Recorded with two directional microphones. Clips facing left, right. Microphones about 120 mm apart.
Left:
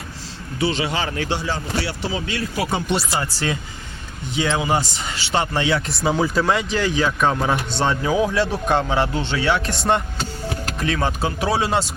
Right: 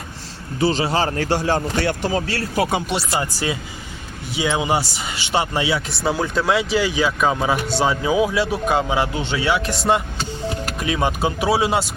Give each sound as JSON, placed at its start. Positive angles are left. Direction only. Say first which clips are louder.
{"t": 0.6, "sound": "a man's voice", "louder": "right 3 dB", "side_deg": -40}
{"t": 3.2, "sound": "a man's voice", "louder": "right 1 dB", "side_deg": -15}